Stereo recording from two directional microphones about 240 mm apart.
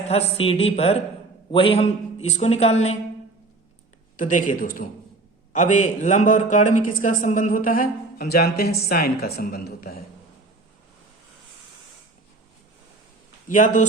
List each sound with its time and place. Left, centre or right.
0.1 s a woman's voice: left
4.2 s speech: left
13.5 s speech: left